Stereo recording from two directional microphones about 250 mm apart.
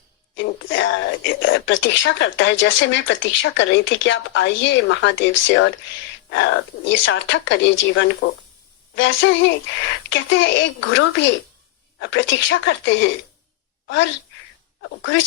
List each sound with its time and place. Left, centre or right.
0.7 s a woman's voice: left